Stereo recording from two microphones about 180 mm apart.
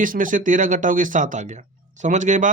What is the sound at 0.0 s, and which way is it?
Speech, 50° right (ahead or behind).